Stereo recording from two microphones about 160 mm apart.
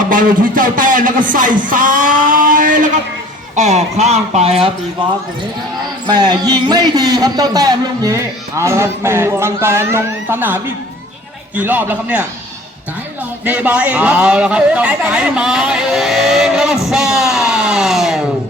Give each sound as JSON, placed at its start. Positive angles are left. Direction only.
{"t": 0.1, "sound": "a sound", "side_deg": -60}
{"t": 3.5, "sound": "speech", "side_deg": -45}
{"t": 6.1, "sound": "a man's voice", "side_deg": -25}
{"t": 13.4, "sound": "a man's voice", "side_deg": -10}